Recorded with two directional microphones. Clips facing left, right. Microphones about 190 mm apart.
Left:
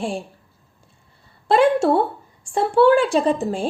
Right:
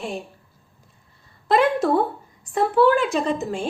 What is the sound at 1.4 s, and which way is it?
A woman's voice, 30° left (ahead or behind).